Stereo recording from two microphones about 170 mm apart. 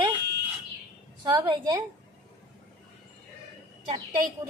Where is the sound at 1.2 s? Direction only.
20° right (ahead or behind).